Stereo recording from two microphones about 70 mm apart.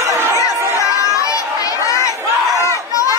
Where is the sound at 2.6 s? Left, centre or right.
Left.